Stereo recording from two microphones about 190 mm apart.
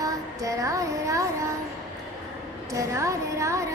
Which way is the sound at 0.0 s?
20° right (ahead or behind).